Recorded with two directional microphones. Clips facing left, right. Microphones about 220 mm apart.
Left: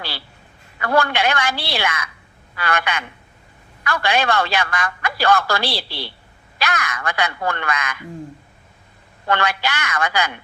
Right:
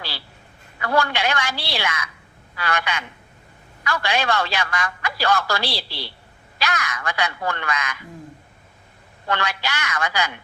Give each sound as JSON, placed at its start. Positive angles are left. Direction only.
{"t": 0.8, "sound": "a man's voice", "side_deg": 55}
{"t": 9.2, "sound": "a man's voice", "side_deg": 55}